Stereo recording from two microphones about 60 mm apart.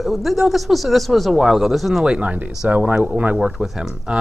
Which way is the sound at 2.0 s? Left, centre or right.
Centre.